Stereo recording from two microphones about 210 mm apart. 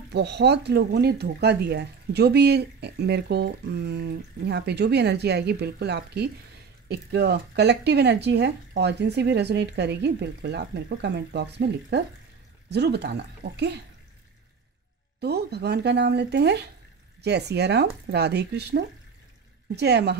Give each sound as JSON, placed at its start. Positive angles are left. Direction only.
{"t": 0.1, "sound": "speech", "side_deg": -55}
{"t": 15.1, "sound": "speech", "side_deg": -50}